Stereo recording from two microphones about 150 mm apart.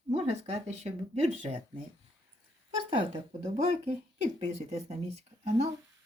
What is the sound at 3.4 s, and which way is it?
Speech, 45° right (ahead or behind).